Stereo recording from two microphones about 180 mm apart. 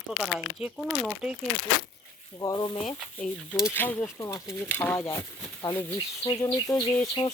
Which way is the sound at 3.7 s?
10° left (ahead or behind).